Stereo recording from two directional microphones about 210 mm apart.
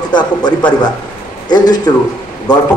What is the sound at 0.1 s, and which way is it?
Speech, 20° left (ahead or behind).